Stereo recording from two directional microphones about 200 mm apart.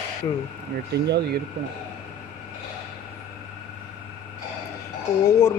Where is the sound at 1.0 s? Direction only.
55° right (ahead or behind).